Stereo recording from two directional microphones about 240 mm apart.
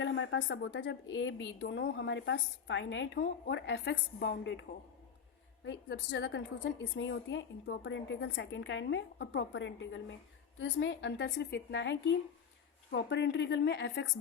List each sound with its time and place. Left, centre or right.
0.0 s a woman's voice: left
5.6 s a woman's voice: left